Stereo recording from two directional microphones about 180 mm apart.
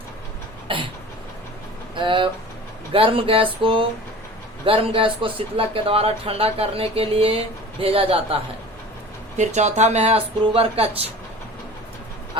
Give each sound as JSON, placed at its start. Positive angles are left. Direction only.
{"t": 0.7, "sound": "speech", "side_deg": -30}
{"t": 2.0, "sound": "speech", "side_deg": -25}
{"t": 9.4, "sound": "speech", "side_deg": -40}